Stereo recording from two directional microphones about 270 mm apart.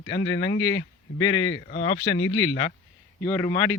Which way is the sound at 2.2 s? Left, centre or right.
Left.